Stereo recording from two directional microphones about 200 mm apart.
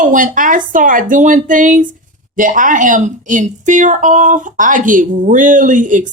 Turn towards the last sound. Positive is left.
turn(degrees=-40)  # may be behind; listen again after turning